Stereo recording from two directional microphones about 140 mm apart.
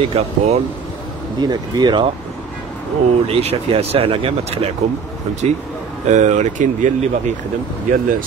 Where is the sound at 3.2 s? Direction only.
45° right (ahead or behind).